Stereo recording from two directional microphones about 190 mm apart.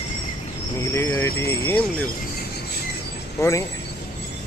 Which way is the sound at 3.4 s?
15° left (ahead or behind).